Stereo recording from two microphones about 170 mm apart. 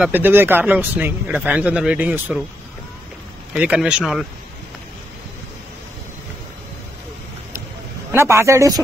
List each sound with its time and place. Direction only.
0.0 s speech: 10° right (ahead or behind)
3.5 s speech: 5° right (ahead or behind)
8.1 s speech: 15° right (ahead or behind)